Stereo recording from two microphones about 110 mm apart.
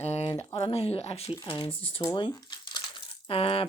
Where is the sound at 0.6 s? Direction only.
65° left (ahead or behind).